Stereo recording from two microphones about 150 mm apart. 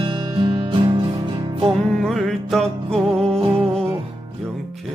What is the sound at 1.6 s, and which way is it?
Music, centre (ahead or behind).